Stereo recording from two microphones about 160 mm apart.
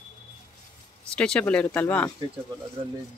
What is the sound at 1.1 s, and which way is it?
Speech, 5° left (ahead or behind).